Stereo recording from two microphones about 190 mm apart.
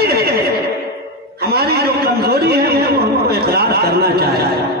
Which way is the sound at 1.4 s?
55° right (ahead or behind).